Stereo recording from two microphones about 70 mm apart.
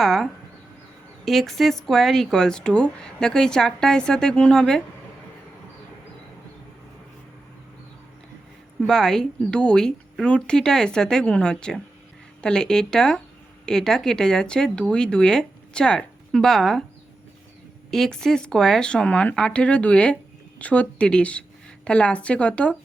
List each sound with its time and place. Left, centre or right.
0.0 s speech: centre
8.9 s speech: centre
17.9 s speech: centre